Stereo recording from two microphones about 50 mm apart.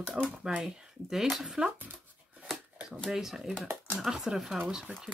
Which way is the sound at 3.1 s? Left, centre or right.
Centre.